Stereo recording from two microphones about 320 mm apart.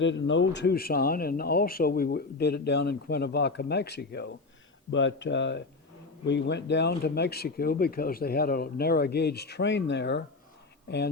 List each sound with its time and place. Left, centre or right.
0.0 s speech: left